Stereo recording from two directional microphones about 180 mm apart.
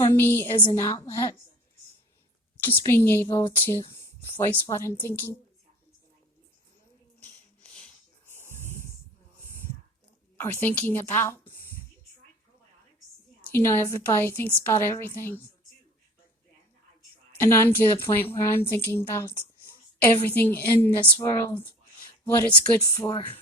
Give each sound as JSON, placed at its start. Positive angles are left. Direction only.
{"t": 0.0, "sound": "a woman's voice", "side_deg": 15}
{"t": 0.6, "sound": "speech", "side_deg": 20}
{"t": 2.6, "sound": "a woman's voice", "side_deg": 15}
{"t": 8.3, "sound": "a sound", "side_deg": 15}
{"t": 10.3, "sound": "a woman's voice", "side_deg": 10}
{"t": 13.5, "sound": "a woman's voice", "side_deg": 15}
{"t": 17.3, "sound": "a woman's voice", "side_deg": 10}